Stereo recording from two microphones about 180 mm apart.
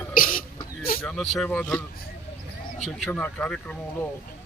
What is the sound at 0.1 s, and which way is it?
Throat clearing, 50° left (ahead or behind).